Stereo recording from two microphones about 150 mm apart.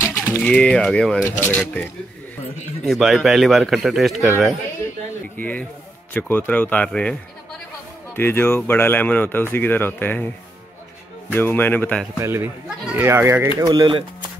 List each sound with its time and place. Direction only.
0.1 s speech: 10° left (ahead or behind)
5.4 s speech: 10° left (ahead or behind)
8.2 s speech: 15° left (ahead or behind)
11.3 s speech: 15° left (ahead or behind)
12.2 s speech: 20° right (ahead or behind)
12.6 s speech: 5° right (ahead or behind)
13.0 s speech: 15° right (ahead or behind)
13.6 s speech: 25° right (ahead or behind)